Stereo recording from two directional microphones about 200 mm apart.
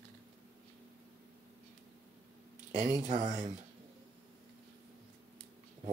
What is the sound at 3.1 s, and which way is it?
Speech, 40° right (ahead or behind).